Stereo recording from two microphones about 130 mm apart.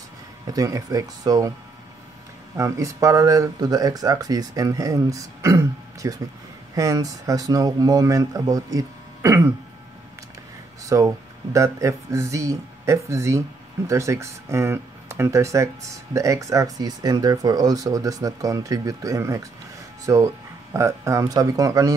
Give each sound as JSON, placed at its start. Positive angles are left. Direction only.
{"t": 0.5, "sound": "speech", "side_deg": -25}
{"t": 2.5, "sound": "speech", "side_deg": -25}
{"t": 10.8, "sound": "a sound", "side_deg": -25}
{"t": 11.5, "sound": "speech", "side_deg": -25}